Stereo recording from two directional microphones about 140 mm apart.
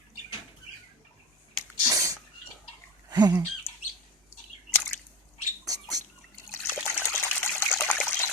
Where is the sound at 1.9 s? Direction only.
25° right (ahead or behind).